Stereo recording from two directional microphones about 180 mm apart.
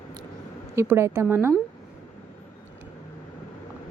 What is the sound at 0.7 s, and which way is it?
Speech, 15° right (ahead or behind).